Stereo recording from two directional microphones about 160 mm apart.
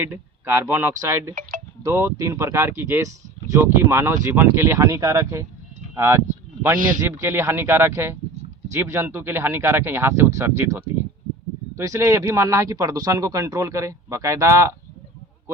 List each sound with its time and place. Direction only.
0.0 s speech: 15° right (ahead or behind)
11.8 s speech: 20° right (ahead or behind)